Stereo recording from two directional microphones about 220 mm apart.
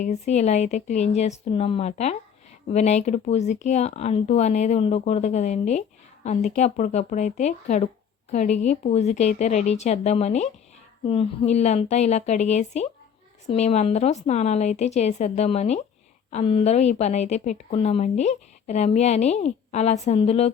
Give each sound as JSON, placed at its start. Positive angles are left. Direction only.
{"t": 0.0, "sound": "speech", "side_deg": 30}